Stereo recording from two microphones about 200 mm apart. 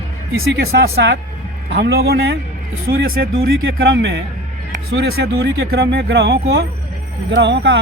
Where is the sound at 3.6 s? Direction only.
60° right (ahead or behind).